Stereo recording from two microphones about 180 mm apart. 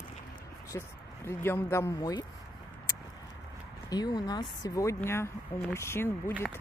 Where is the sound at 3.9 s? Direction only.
20° left (ahead or behind).